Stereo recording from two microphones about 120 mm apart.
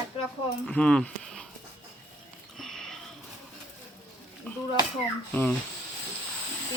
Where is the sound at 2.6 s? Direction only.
5° left (ahead or behind).